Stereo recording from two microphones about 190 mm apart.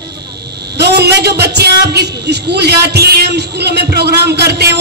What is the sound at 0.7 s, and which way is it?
A man's voice, 60° right (ahead or behind).